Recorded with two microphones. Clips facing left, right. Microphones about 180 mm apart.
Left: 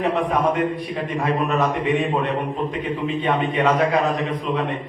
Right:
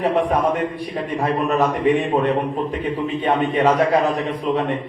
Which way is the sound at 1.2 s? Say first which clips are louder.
Right 2 dB; 40° right (ahead or behind).